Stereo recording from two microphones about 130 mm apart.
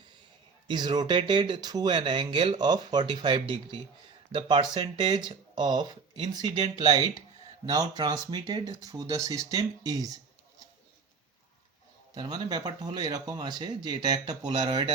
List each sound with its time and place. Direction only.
0.7 s speech: 35° right (ahead or behind)
12.1 s speech: 30° right (ahead or behind)